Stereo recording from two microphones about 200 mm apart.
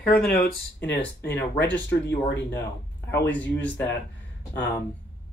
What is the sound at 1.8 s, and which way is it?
Speech, 60° left (ahead or behind).